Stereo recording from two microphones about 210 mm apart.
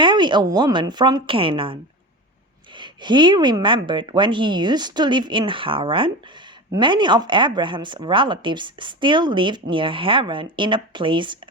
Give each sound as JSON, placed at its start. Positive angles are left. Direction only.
{"t": 0.0, "sound": "speech", "side_deg": -20}